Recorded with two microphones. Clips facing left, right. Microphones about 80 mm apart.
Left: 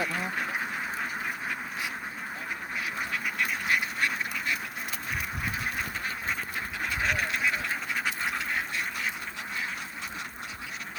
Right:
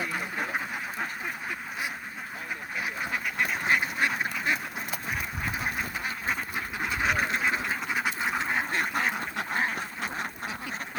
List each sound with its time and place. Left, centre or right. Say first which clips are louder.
3.3 s duck: right 3 dB; right
6.9 s quack: right 2 dB; centre
7.2 s duck: right 2 dB; right
8.7 s duck: right 5 dB; right